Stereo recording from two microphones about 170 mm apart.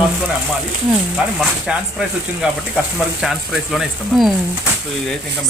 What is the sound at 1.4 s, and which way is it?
Speech, 5° right (ahead or behind).